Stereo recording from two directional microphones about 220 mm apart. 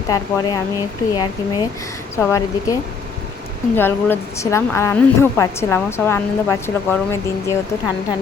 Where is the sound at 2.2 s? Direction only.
15° left (ahead or behind).